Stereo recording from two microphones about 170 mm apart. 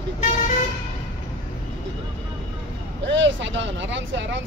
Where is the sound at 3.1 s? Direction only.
90° right.